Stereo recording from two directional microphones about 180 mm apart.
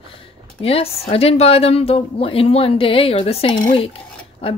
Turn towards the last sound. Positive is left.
turn(degrees=30)  # may be behind; listen again after turning